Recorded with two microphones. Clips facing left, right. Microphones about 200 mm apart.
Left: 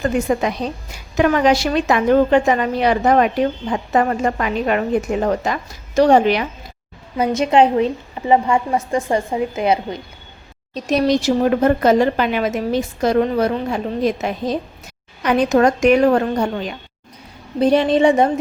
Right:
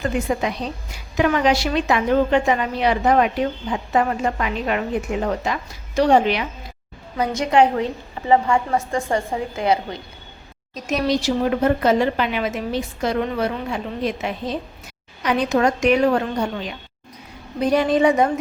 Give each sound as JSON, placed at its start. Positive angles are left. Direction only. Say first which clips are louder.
{"t": 0.3, "sound": "a woman's voice", "louder": "left 4 dB", "side_deg": 50}
{"t": 7.2, "sound": "a woman's voice", "louder": "left 3 dB", "side_deg": 20}
{"t": 10.8, "sound": "a woman's voice", "louder": "left 4 dB", "side_deg": 35}
{"t": 17.6, "sound": "a woman's voice", "louder": "left 3 dB", "side_deg": 25}